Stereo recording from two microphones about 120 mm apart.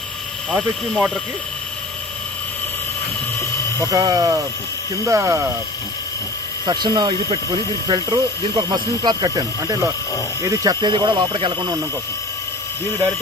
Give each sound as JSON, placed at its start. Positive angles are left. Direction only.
{"t": 0.6, "sound": "speech", "side_deg": -10}
{"t": 3.3, "sound": "helicopter", "side_deg": 20}
{"t": 3.9, "sound": "speech", "side_deg": -30}
{"t": 6.6, "sound": "speech", "side_deg": -35}
{"t": 10.8, "sound": "speech", "side_deg": -40}